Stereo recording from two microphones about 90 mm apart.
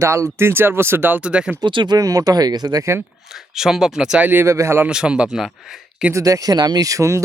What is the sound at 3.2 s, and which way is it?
Speech, 5° right (ahead or behind).